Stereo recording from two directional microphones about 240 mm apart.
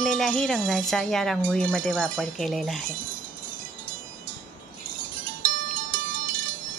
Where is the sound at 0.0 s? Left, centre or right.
Centre.